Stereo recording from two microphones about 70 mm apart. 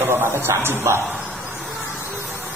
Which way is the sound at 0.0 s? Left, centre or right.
Right.